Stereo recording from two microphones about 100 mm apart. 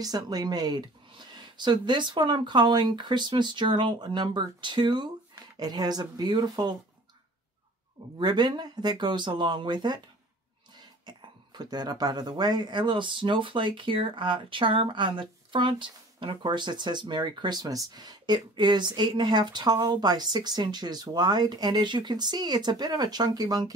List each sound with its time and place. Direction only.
0.0 s speech: 40° right (ahead or behind)
8.2 s speech: 45° right (ahead or behind)
11.1 s speech: 45° right (ahead or behind)